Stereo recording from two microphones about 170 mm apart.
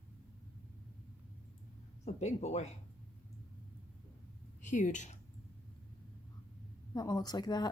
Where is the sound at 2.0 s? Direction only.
40° left (ahead or behind).